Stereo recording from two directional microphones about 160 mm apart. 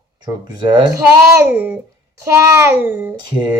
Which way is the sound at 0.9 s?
10° right (ahead or behind).